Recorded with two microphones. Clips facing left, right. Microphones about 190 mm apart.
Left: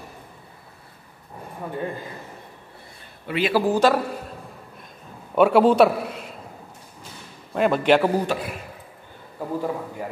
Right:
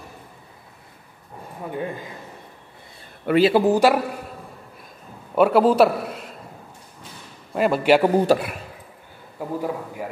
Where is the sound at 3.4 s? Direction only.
20° right (ahead or behind).